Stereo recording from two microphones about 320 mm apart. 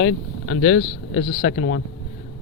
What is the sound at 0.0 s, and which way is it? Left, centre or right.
Speech, left.